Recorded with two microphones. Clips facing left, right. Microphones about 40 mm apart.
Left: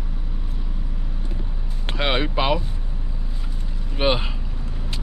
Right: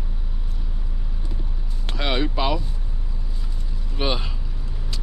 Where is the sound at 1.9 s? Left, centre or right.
Left.